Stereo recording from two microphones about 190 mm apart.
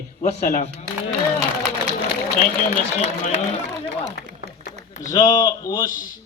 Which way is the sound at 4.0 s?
40° right (ahead or behind).